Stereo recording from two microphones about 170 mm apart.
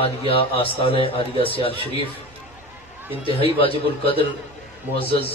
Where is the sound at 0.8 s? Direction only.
35° left (ahead or behind).